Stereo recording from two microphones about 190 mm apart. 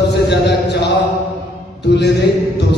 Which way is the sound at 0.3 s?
60° left (ahead or behind).